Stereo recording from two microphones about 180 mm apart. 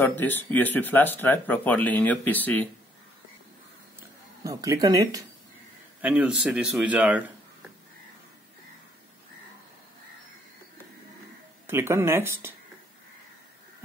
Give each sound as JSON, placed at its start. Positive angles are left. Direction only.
{"t": 0.0, "sound": "speech", "side_deg": 10}
{"t": 4.4, "sound": "speech", "side_deg": -20}
{"t": 5.9, "sound": "speech", "side_deg": -5}
{"t": 11.6, "sound": "speech", "side_deg": -15}